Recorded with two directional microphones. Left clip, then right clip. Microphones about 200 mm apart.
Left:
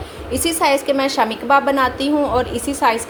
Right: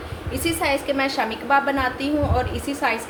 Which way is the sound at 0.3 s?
30° left (ahead or behind).